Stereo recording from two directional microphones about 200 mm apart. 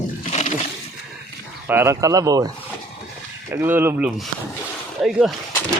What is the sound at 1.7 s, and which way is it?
Speech, 10° right (ahead or behind).